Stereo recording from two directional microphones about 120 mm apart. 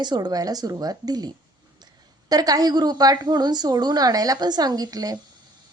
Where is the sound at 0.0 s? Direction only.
35° right (ahead or behind).